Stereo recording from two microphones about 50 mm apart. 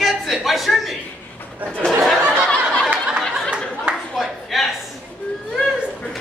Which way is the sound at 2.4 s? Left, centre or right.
Centre.